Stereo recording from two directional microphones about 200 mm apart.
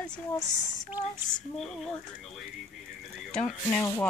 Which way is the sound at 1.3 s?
Centre (ahead or behind).